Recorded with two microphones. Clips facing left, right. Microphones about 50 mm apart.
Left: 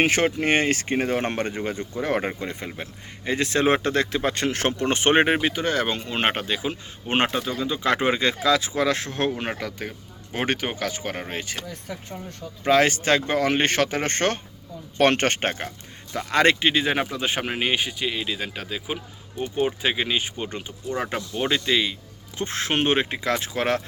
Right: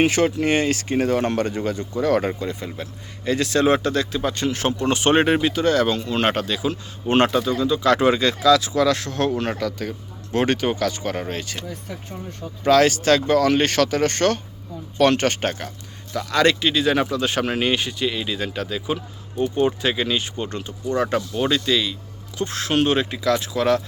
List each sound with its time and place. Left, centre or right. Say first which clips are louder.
0.0 s speech: right 2 dB; left
11.7 s speech: right 1 dB; centre
12.6 s speech: right 3 dB; left